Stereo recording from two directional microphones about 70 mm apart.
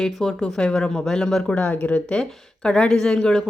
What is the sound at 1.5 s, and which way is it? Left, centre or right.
Speech, centre.